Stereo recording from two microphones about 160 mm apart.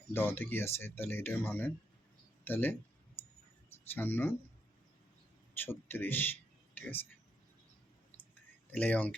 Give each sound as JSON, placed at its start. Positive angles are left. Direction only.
{"t": 0.1, "sound": "speech", "side_deg": 15}
{"t": 3.9, "sound": "speech", "side_deg": 10}
{"t": 5.5, "sound": "speech", "side_deg": 10}
{"t": 8.7, "sound": "speech", "side_deg": 10}